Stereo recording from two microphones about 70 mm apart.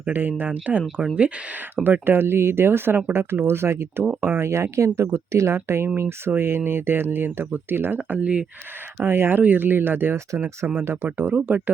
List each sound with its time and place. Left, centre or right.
0.0 s speech: right
9.0 s speech: right